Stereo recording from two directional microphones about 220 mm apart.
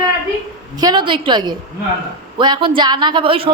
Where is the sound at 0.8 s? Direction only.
20° right (ahead or behind).